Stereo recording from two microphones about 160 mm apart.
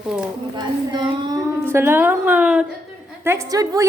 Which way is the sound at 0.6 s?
25° right (ahead or behind).